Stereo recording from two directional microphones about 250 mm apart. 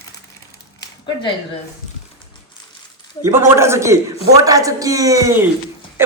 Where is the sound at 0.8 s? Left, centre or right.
Centre.